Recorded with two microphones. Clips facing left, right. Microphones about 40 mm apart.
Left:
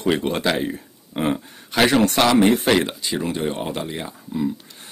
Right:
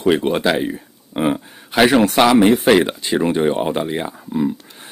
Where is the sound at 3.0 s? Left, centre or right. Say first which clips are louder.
Right 7 dB; right.